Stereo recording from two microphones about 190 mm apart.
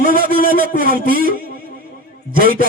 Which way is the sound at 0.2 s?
50° right (ahead or behind).